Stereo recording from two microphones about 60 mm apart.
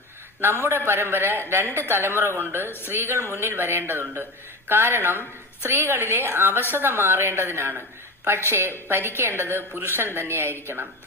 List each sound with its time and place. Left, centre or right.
0.4 s a woman's voice: right